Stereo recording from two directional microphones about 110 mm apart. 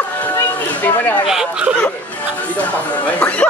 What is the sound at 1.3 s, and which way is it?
Speech, 5° right (ahead or behind).